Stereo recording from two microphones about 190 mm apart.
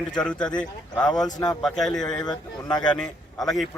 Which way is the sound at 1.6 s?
Centre (ahead or behind).